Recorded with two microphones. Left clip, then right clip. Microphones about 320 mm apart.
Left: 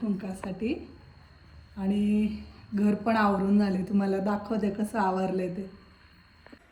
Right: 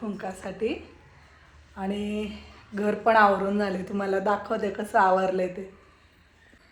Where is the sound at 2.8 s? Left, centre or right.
Centre.